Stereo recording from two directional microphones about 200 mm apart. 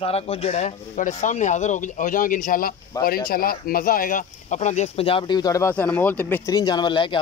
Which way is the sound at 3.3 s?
50° left (ahead or behind).